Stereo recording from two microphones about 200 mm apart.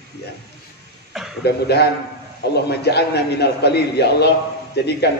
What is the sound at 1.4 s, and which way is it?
A man's voice, 55° left (ahead or behind).